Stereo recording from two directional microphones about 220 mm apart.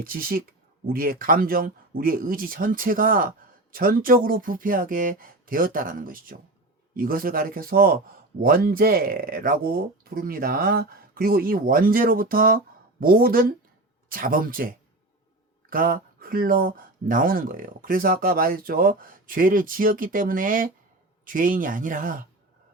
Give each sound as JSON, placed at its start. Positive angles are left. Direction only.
{"t": 0.0, "sound": "speech", "side_deg": -40}